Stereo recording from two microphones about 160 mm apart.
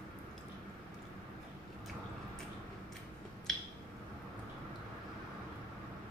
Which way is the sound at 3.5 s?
Centre (ahead or behind).